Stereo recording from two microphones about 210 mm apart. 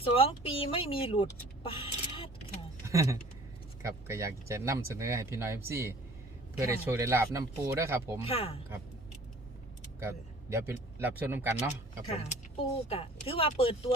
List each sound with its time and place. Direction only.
0.0 s speech: 25° left (ahead or behind)
2.8 s speech: 15° right (ahead or behind)
8.2 s speech: 25° left (ahead or behind)
10.0 s speech: 15° right (ahead or behind)
12.1 s speech: 25° left (ahead or behind)